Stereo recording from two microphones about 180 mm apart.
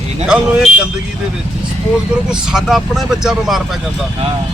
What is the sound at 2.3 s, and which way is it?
Speech, centre (ahead or behind).